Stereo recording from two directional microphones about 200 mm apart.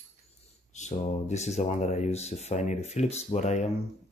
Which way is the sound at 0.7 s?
35° left (ahead or behind).